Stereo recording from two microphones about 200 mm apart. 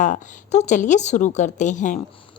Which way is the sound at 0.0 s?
35° left (ahead or behind).